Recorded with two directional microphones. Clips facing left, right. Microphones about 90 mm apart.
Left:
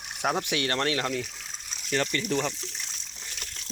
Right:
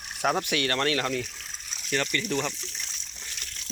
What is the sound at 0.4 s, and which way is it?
Speech, 25° left (ahead or behind).